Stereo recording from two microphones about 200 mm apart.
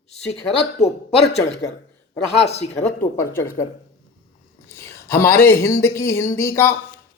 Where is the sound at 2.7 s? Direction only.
10° left (ahead or behind).